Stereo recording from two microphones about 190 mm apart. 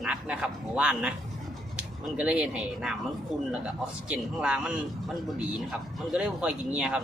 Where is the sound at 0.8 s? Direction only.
5° right (ahead or behind).